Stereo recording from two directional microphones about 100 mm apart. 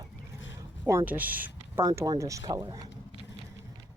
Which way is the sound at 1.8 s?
30° right (ahead or behind).